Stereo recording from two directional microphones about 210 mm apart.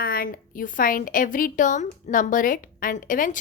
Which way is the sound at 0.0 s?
45° left (ahead or behind).